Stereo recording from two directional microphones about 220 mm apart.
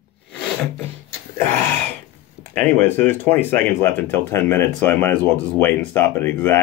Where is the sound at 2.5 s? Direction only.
10° left (ahead or behind).